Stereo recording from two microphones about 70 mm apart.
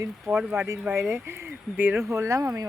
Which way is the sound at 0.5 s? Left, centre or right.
Right.